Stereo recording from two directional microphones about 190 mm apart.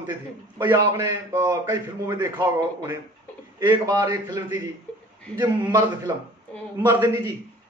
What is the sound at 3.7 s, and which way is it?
Speech, 20° right (ahead or behind).